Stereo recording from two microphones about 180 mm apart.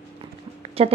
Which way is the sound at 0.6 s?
35° right (ahead or behind).